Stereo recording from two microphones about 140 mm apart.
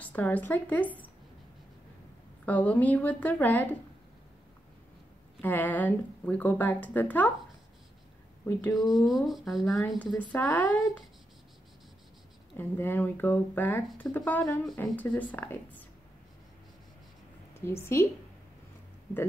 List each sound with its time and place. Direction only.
0.0 s a woman's voice: 10° left (ahead or behind)
2.4 s a woman's voice: 10° left (ahead or behind)
5.4 s a woman's voice: 10° left (ahead or behind)
8.5 s a woman's voice: 10° left (ahead or behind)
8.7 s speech: centre (ahead or behind)
10.1 s a woman's voice: 10° left (ahead or behind)
12.5 s a woman's voice: 15° left (ahead or behind)
17.6 s a woman's voice: 20° left (ahead or behind)